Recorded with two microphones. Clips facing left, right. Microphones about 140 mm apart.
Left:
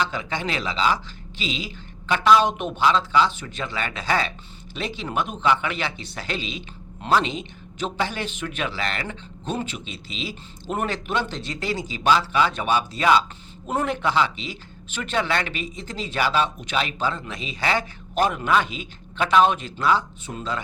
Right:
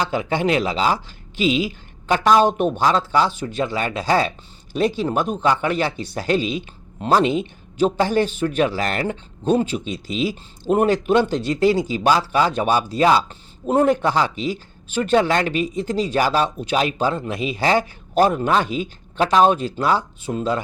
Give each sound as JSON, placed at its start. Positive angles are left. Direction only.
{"t": 0.0, "sound": "speech", "side_deg": -40}
{"t": 2.0, "sound": "speech", "side_deg": -40}